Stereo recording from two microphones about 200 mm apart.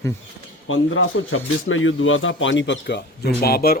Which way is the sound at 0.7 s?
85° left.